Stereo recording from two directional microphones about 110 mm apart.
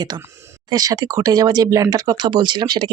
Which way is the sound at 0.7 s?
35° right (ahead or behind).